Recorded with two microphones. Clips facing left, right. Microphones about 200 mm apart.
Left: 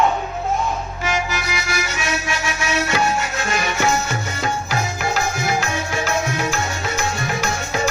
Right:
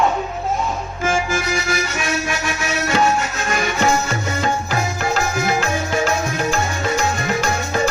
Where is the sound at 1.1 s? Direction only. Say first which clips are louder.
Right 4 dB; 50° right (ahead or behind).